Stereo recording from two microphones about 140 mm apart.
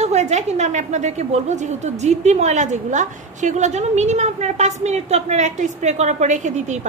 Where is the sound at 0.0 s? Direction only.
55° right (ahead or behind).